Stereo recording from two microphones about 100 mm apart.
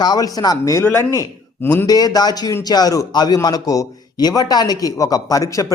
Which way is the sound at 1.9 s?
40° left (ahead or behind).